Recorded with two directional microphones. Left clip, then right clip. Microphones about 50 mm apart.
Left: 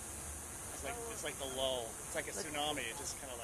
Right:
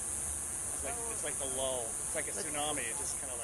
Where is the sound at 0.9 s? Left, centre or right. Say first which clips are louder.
Right 1 dB; left.